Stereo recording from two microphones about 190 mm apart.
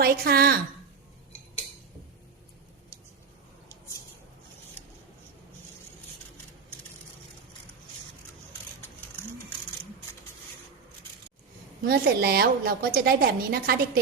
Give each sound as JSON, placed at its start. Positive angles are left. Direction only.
{"t": 0.0, "sound": "a woman's voice", "side_deg": -55}
{"t": 11.8, "sound": "a woman's voice", "side_deg": -55}